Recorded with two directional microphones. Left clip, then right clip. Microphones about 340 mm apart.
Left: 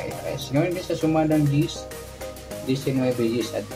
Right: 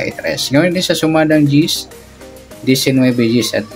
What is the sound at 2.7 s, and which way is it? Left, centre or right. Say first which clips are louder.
Speech: right 11 dB; right.